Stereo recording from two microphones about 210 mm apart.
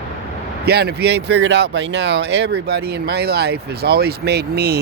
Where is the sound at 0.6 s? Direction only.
50° right (ahead or behind).